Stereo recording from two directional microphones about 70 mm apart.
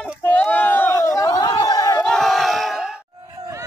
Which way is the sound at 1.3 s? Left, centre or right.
Left.